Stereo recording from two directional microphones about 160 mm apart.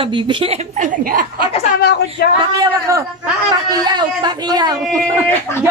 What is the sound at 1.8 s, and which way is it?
Speech, 90° left.